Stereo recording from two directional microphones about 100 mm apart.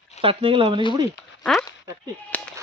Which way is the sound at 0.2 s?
60° right (ahead or behind).